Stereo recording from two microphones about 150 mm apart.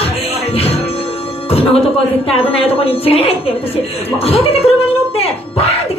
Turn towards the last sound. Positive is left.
turn(degrees=45)  # may be behind; listen again after turning